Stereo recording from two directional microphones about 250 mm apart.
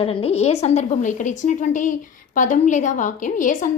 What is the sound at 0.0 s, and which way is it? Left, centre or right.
A woman's voice, left.